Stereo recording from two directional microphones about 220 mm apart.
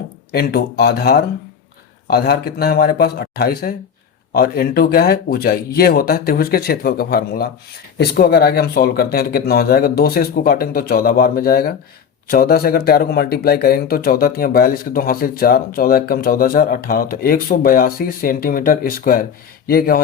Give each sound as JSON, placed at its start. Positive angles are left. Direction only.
{"t": 0.3, "sound": "speech", "side_deg": 45}